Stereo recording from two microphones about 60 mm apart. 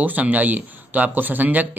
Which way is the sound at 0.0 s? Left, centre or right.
Right.